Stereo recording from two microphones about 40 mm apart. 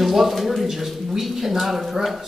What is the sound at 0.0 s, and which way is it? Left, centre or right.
Speech, centre.